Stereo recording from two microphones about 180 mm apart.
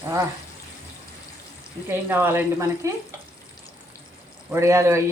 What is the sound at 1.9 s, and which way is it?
Speech, 10° right (ahead or behind).